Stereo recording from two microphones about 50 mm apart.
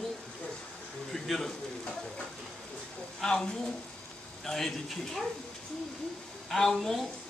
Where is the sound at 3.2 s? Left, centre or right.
Centre.